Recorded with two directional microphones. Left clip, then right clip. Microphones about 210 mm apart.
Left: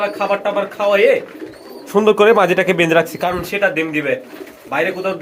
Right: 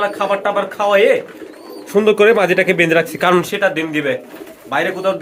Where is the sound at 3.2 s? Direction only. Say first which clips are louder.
Right 6 dB; 25° right (ahead or behind).